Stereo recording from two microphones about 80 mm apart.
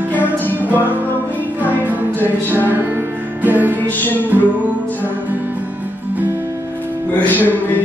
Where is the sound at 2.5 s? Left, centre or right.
Right.